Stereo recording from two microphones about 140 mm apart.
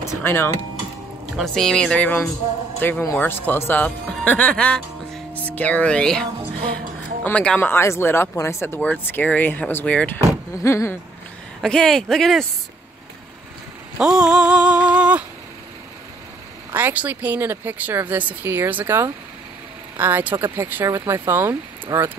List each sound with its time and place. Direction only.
0.2 s speech: 15° left (ahead or behind)
1.3 s speech: 5° left (ahead or behind)
7.2 s speech: 10° left (ahead or behind)
10.5 s speech: 20° left (ahead or behind)
11.6 s speech: 5° left (ahead or behind)
13.9 s a sound: 5° right (ahead or behind)
16.7 s speech: 10° right (ahead or behind)